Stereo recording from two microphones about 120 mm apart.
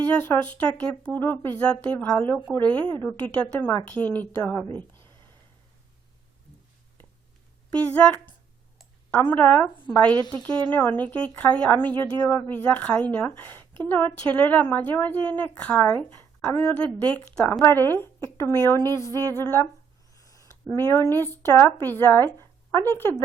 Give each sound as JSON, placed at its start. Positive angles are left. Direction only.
{"t": 0.8, "sound": "a woman's voice", "side_deg": 15}
{"t": 4.9, "sound": "a sound", "side_deg": -40}
{"t": 7.7, "sound": "a woman's voice", "side_deg": 10}